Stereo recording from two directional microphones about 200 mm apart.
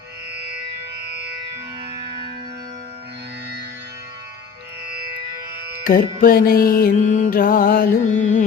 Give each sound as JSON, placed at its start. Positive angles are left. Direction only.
{"t": 5.8, "sound": "music", "side_deg": 45}